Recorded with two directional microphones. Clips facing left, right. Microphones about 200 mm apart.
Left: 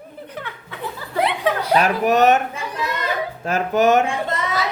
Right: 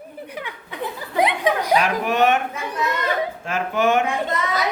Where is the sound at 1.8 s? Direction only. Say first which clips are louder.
Left 3 dB; 40° left (ahead or behind).